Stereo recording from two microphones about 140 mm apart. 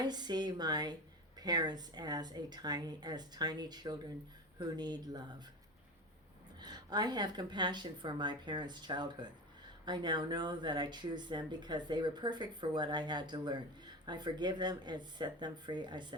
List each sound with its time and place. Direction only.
0.0 s speech: 30° right (ahead or behind)
6.6 s speech: 30° right (ahead or behind)